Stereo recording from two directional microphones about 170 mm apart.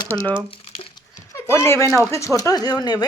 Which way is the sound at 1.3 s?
15° left (ahead or behind).